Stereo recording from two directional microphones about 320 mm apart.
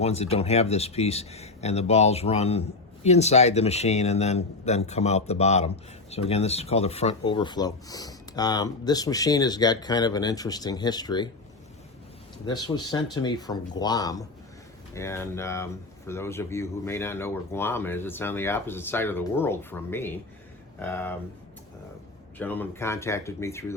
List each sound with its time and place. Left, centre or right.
0.0 s speech: centre
12.5 s speech: centre
22.4 s speech: centre